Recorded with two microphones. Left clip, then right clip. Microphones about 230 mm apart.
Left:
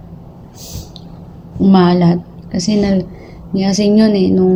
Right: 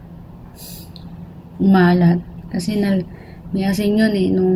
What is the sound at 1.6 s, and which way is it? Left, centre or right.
Speech, centre.